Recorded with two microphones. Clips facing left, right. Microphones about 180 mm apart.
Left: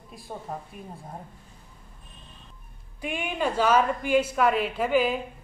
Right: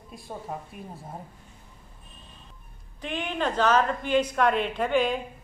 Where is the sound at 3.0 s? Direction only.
10° left (ahead or behind).